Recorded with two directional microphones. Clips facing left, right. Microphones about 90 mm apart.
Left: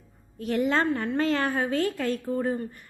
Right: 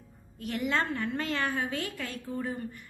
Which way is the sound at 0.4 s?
35° left (ahead or behind).